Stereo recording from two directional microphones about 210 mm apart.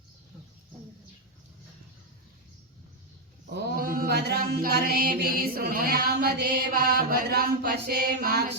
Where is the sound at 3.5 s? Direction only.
50° right (ahead or behind).